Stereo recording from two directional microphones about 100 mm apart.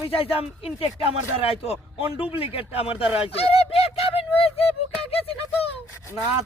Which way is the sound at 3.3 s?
80° left.